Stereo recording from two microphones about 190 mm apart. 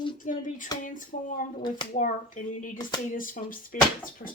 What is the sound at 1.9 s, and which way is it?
Speech, 40° left (ahead or behind).